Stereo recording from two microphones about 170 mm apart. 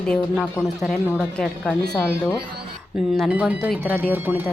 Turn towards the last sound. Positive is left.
turn(degrees=0)  # may be behind; listen again after turning